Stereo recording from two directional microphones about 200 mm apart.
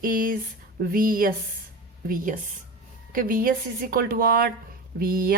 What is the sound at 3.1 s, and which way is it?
A woman's voice, 45° right (ahead or behind).